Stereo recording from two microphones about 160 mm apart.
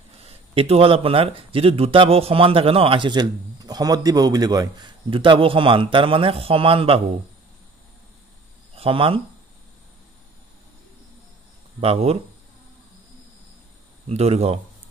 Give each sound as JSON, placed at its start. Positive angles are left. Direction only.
{"t": 0.2, "sound": "speech", "side_deg": -40}
{"t": 8.7, "sound": "speech", "side_deg": -35}
{"t": 11.8, "sound": "speech", "side_deg": -40}
{"t": 14.0, "sound": "speech", "side_deg": -40}